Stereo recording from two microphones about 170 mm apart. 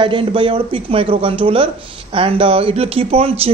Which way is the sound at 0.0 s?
30° right (ahead or behind).